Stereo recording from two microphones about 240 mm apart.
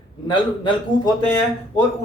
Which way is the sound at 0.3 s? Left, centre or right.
Centre.